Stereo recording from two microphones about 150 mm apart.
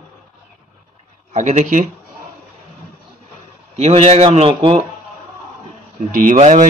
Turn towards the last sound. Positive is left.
turn(degrees=-55)  # may be behind; listen again after turning